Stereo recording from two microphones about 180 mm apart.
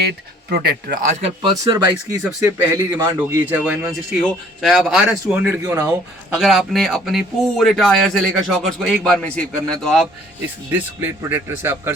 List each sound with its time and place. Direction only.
0.5 s speech: 60° right (ahead or behind)
1.2 s speech: 30° right (ahead or behind); by 10.1 s centre (ahead or behind)
10.7 s speech: 10° right (ahead or behind)